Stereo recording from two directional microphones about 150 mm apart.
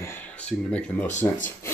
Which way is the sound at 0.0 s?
15° left (ahead or behind).